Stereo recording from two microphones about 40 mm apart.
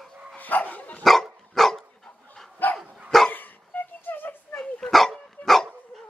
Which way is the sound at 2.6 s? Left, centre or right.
Left.